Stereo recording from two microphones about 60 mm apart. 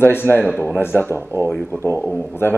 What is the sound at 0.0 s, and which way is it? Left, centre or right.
Speech, left.